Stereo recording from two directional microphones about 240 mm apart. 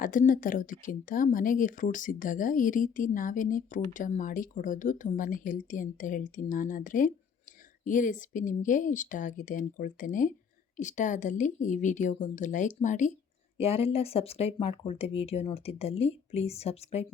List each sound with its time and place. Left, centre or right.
0.0 s speech: left